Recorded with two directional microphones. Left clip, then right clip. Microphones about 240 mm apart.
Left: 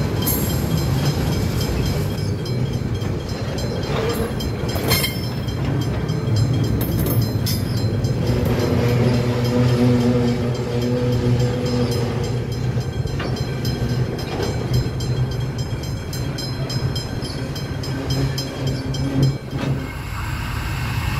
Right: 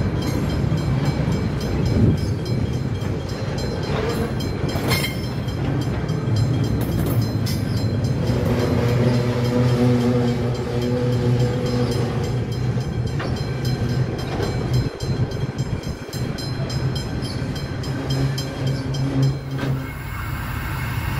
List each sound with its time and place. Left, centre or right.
4.8 s vehicle: left
8.5 s vehicle: centre